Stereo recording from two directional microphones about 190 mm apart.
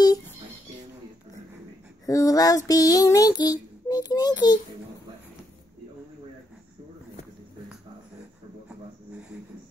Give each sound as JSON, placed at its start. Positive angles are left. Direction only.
{"t": 2.0, "sound": "child singing", "side_deg": 20}